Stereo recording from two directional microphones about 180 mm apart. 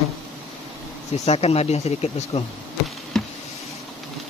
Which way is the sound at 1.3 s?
35° left (ahead or behind).